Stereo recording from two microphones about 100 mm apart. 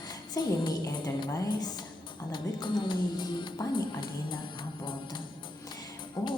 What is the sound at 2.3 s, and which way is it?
A woman's voice, 50° left (ahead or behind).